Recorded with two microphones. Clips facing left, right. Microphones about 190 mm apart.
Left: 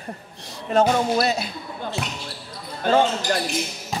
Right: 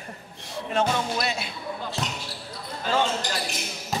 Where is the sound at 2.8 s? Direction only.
55° left (ahead or behind).